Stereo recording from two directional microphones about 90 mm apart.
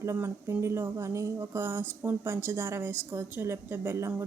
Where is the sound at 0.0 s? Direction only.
30° right (ahead or behind).